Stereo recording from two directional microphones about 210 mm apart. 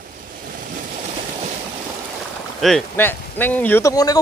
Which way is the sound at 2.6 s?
Centre (ahead or behind).